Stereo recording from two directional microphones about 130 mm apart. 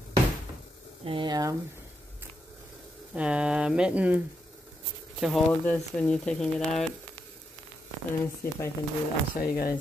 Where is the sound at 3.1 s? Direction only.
10° right (ahead or behind).